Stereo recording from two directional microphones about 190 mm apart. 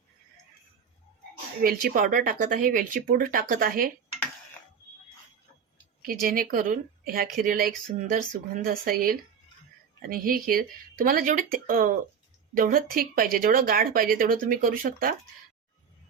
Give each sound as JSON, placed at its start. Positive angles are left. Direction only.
{"t": 1.6, "sound": "speech", "side_deg": -50}
{"t": 6.0, "sound": "speech", "side_deg": -50}